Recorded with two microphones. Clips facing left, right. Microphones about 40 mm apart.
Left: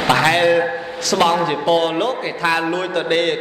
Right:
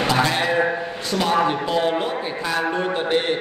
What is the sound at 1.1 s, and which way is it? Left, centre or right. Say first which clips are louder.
A man's voice: left 4 dB; left.